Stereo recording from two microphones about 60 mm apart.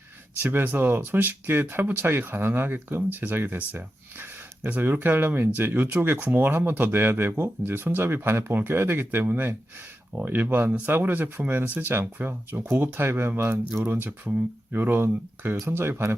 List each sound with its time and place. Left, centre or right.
0.3 s speech: right